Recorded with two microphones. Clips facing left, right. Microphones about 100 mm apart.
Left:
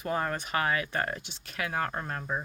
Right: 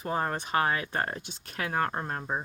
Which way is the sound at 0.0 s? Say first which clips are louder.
Right 1 dB; 30° right (ahead or behind).